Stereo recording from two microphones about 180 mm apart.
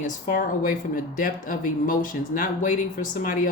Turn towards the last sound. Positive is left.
turn(degrees=50)  # may be behind; listen again after turning